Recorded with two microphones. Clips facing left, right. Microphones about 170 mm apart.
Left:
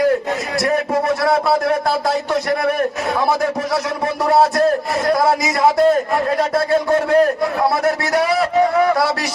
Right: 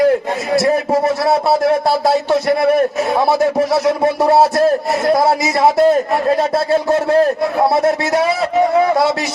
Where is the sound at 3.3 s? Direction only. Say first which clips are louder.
Right 5 dB; 25° right (ahead or behind).